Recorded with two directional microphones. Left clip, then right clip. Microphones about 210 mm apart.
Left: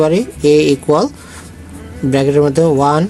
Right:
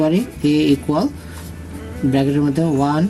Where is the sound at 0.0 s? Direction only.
50° left (ahead or behind).